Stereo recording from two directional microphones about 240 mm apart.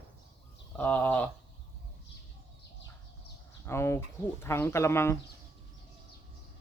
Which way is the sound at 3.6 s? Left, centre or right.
Centre.